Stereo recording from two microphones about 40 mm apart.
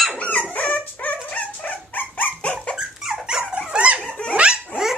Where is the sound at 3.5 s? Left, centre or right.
Right.